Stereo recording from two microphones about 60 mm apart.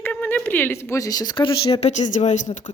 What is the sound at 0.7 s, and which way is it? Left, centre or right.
Speech, left.